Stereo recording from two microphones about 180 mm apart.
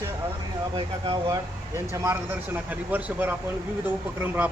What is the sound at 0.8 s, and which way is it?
Speech, 30° right (ahead or behind).